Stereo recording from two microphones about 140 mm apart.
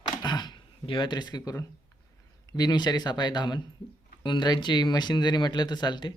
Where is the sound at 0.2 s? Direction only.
30° left (ahead or behind).